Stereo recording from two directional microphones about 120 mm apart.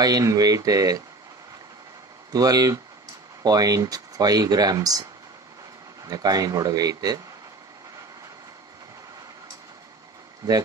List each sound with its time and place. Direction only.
0.0 s speech: 30° right (ahead or behind)
2.3 s speech: 30° right (ahead or behind)
6.0 s speech: 30° right (ahead or behind)
10.4 s speech: 35° right (ahead or behind)